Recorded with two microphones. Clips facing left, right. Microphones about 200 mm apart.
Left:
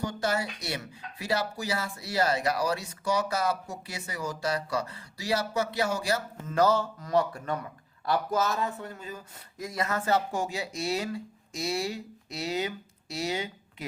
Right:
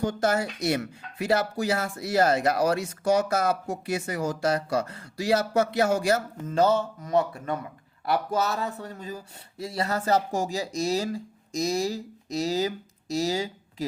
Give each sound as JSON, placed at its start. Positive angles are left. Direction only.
{"t": 0.0, "sound": "speech", "side_deg": -50}
{"t": 6.5, "sound": "speech", "side_deg": -25}